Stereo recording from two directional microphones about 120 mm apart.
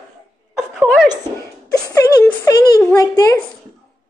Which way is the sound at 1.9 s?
25° left (ahead or behind).